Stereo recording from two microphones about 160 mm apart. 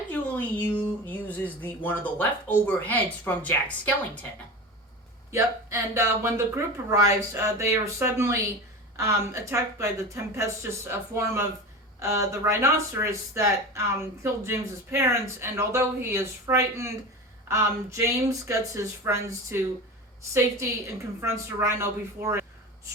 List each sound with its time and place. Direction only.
0.1 s speech: 10° left (ahead or behind)
5.3 s speech: 15° right (ahead or behind)